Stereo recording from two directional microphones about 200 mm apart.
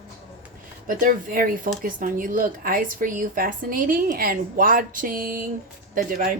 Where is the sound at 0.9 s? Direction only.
45° right (ahead or behind).